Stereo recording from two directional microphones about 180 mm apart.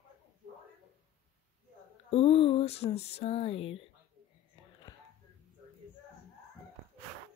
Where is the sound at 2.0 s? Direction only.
30° left (ahead or behind).